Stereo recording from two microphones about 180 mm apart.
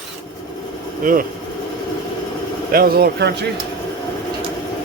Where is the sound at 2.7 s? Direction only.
55° right (ahead or behind).